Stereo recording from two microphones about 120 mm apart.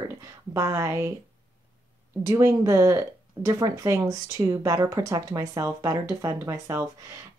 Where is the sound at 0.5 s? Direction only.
25° right (ahead or behind).